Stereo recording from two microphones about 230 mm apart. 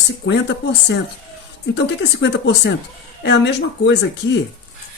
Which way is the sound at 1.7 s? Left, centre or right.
Left.